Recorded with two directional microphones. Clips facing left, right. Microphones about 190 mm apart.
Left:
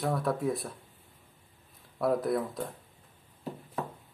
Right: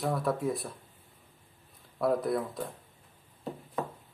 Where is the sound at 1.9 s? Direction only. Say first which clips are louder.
Even; centre (ahead or behind).